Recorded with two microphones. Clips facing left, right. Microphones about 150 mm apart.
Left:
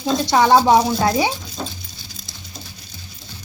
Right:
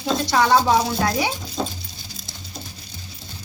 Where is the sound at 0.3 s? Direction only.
30° left (ahead or behind).